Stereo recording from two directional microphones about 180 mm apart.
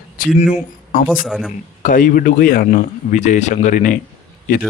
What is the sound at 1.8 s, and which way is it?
Speech, 50° left (ahead or behind).